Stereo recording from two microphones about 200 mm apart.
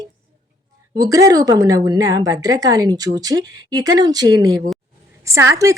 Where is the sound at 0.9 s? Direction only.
15° right (ahead or behind).